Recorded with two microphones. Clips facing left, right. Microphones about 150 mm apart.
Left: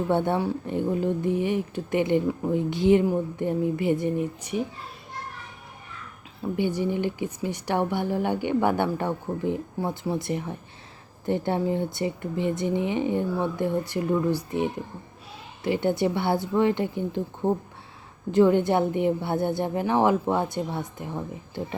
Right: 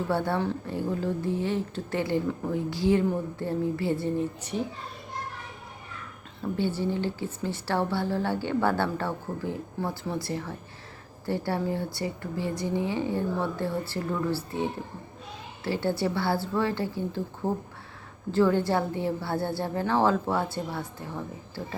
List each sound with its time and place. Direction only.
0.1 s speech: 20° left (ahead or behind)
6.4 s a woman's voice: 15° left (ahead or behind)